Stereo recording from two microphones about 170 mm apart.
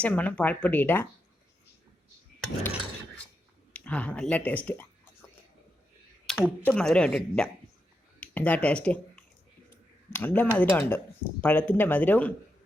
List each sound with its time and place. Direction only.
0.0 s speech: 10° left (ahead or behind)
3.7 s speech: 10° left (ahead or behind)
6.2 s a sound: centre (ahead or behind)
6.7 s speech: 5° left (ahead or behind)